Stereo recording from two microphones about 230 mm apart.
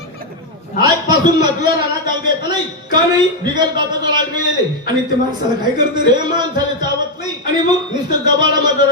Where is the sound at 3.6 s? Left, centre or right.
Centre.